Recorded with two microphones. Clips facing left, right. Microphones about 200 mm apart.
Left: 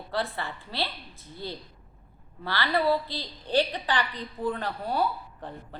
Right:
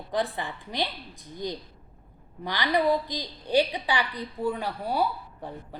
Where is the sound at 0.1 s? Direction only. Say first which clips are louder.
Right 2 dB; 15° right (ahead or behind).